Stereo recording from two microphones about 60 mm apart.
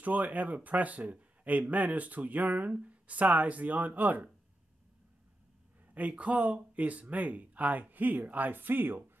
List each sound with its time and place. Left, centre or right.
0.0 s speech: right
5.9 s speech: right